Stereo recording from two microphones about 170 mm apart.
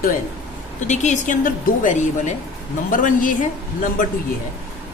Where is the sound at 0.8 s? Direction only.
45° left (ahead or behind).